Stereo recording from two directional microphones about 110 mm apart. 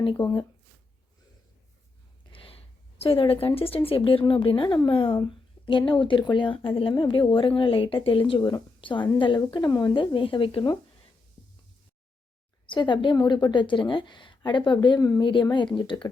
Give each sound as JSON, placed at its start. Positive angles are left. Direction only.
{"t": 0.0, "sound": "speech", "side_deg": 50}
{"t": 2.3, "sound": "speech", "side_deg": 55}
{"t": 12.6, "sound": "a woman's voice", "side_deg": 45}